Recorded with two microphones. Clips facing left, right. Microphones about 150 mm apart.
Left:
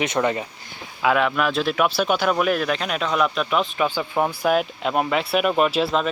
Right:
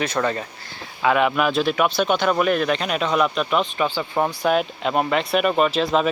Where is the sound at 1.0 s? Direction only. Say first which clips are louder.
Right 1 dB; centre (ahead or behind).